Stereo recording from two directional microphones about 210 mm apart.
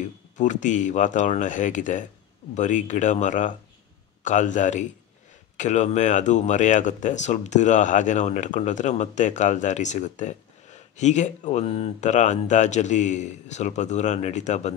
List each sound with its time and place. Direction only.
0.4 s speech: 35° left (ahead or behind)